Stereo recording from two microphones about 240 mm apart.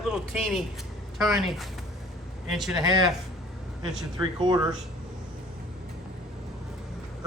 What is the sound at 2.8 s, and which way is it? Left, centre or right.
Speech, centre.